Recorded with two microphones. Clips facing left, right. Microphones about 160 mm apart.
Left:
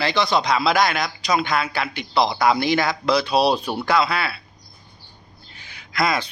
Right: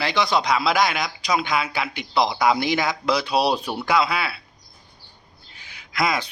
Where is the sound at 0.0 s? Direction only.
15° right (ahead or behind).